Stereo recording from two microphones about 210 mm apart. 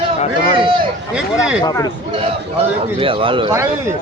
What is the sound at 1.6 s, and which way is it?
Speech, 15° left (ahead or behind).